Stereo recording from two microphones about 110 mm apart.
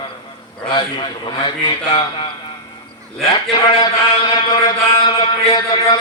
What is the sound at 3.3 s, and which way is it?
A man's voice, 50° left (ahead or behind).